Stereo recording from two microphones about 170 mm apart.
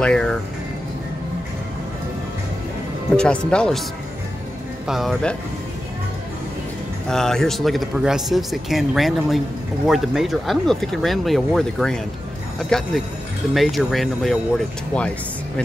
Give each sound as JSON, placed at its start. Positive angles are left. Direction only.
{"t": 0.0, "sound": "speech", "side_deg": 5}
{"t": 3.2, "sound": "speech", "side_deg": 5}
{"t": 4.8, "sound": "speech", "side_deg": 0}
{"t": 7.1, "sound": "speech", "side_deg": 5}